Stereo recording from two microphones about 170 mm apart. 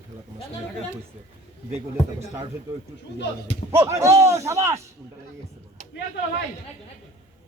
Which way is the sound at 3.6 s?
50° left (ahead or behind).